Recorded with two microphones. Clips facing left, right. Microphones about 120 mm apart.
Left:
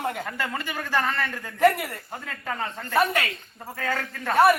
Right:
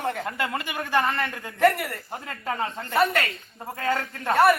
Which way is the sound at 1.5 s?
15° left (ahead or behind).